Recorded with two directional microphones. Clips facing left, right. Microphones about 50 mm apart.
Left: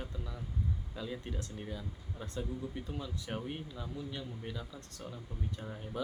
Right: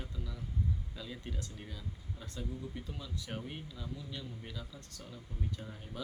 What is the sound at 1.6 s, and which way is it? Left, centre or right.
Speech, left.